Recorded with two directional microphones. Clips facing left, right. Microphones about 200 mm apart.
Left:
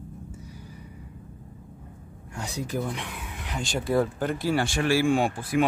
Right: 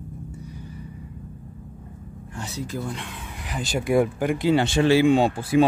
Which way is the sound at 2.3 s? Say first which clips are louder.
Left 1 dB; 15° left (ahead or behind).